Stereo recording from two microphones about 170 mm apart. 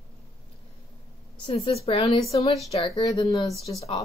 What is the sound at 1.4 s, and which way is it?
Speech, 35° left (ahead or behind).